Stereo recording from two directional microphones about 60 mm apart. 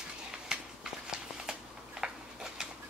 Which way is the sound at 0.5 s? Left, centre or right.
Centre.